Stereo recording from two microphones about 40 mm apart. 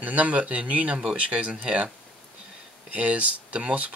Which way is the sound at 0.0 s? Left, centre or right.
Right.